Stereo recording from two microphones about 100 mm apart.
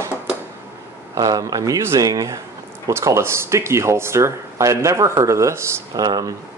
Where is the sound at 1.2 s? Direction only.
35° right (ahead or behind).